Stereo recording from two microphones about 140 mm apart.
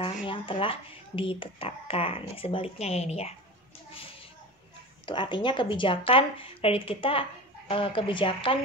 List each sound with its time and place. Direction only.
0.0 s speech: 40° left (ahead or behind)
5.0 s speech: 35° left (ahead or behind)